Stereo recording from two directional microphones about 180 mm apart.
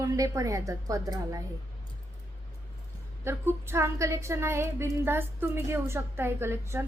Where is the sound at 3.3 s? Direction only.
15° right (ahead or behind).